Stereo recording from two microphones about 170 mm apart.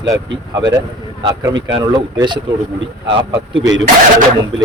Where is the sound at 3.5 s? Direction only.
90° right.